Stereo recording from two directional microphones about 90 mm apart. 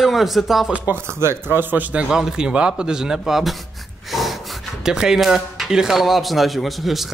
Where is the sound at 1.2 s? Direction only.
25° right (ahead or behind).